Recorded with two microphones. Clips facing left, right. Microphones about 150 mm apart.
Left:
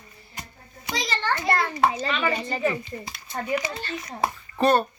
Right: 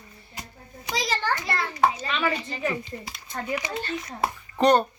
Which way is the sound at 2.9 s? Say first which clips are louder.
Left 1 dB; 20° left (ahead or behind).